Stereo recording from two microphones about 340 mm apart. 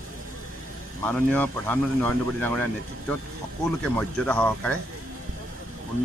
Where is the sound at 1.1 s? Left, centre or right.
Centre.